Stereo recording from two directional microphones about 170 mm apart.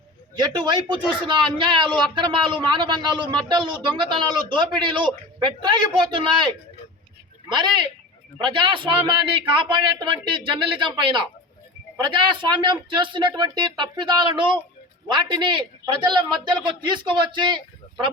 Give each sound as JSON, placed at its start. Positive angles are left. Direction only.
{"t": 0.3, "sound": "speech", "side_deg": -25}
{"t": 8.4, "sound": "speech", "side_deg": -30}